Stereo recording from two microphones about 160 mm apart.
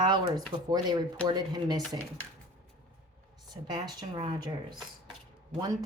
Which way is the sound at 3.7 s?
25° right (ahead or behind).